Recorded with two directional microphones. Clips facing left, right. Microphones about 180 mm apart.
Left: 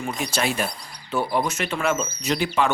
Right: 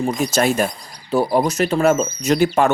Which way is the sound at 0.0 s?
40° right (ahead or behind).